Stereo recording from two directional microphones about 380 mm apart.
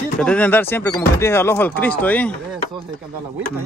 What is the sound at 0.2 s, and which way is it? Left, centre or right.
Speech, centre.